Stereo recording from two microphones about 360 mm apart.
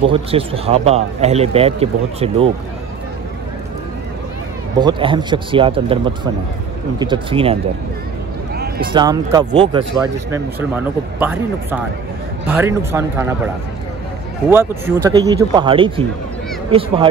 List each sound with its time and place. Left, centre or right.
0.0 s a man's voice: centre
4.7 s a man's voice: centre
8.8 s a man's voice: centre
11.1 s a man's voice: centre
14.5 s a man's voice: centre